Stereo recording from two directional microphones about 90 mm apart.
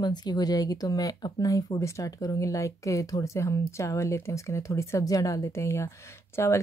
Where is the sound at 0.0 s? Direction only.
50° left (ahead or behind).